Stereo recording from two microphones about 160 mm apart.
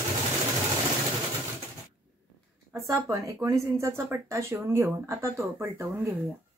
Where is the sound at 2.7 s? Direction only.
20° right (ahead or behind).